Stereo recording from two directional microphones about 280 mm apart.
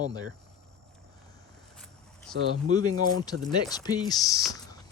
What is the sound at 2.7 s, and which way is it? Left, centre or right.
Speech, centre.